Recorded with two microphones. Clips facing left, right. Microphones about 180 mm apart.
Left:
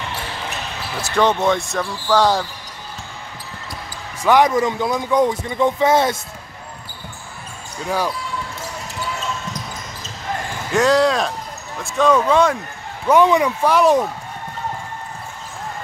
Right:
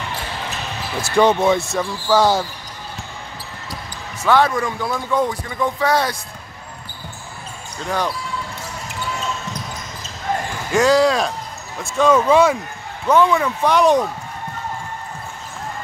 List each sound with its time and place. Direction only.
1.0 s speech: 10° right (ahead or behind)
4.2 s speech: 15° left (ahead or behind)
7.8 s speech: 10° left (ahead or behind)
10.7 s speech: centre (ahead or behind)
13.0 s speech: 15° left (ahead or behind)
13.7 s speech: 5° left (ahead or behind)